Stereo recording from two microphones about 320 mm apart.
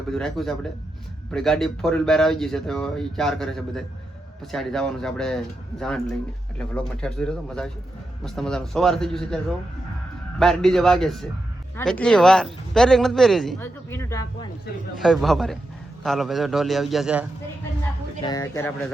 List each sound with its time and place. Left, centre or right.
0.1 s speech: centre
18.3 s speech: centre